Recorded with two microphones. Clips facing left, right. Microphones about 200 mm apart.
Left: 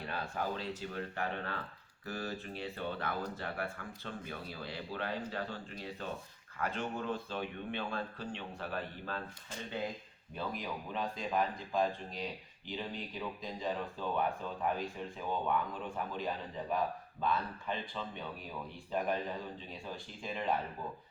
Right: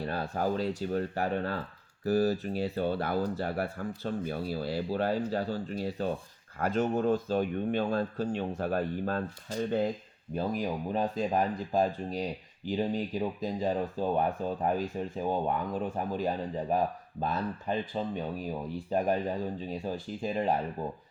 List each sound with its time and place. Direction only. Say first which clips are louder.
0.0 s speech: right 7 dB; 40° right (ahead or behind)